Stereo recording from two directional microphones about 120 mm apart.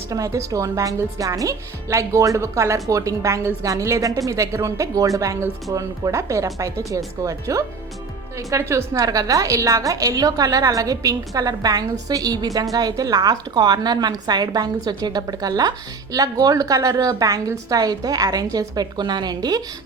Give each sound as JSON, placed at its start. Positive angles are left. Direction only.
{"t": 0.1, "sound": "a woman's voice", "side_deg": -30}